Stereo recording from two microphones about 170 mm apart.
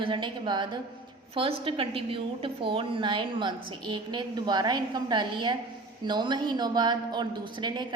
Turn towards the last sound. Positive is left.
turn(degrees=-25)  # may be behind; listen again after turning